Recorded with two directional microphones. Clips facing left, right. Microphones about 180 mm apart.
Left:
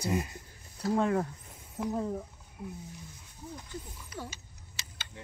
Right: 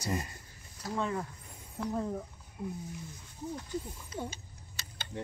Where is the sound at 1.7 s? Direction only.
5° left (ahead or behind).